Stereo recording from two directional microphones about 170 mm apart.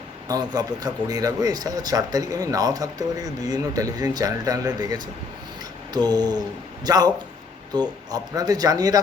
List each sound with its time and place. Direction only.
0.3 s speech: 25° right (ahead or behind)